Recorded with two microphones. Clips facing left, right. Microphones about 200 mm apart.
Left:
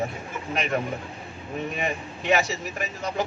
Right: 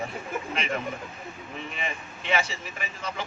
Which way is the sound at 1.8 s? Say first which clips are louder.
Left 6 dB; 40° left (ahead or behind).